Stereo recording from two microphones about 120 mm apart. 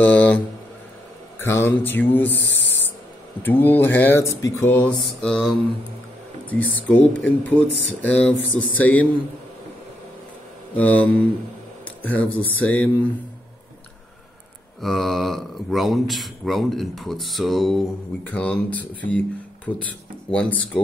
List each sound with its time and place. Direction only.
0.0 s speech: 10° left (ahead or behind)
1.4 s speech: 20° left (ahead or behind)
6.5 s speech: 15° left (ahead or behind)
10.8 s speech: 15° left (ahead or behind)
14.8 s speech: centre (ahead or behind)
18.3 s speech: 10° left (ahead or behind)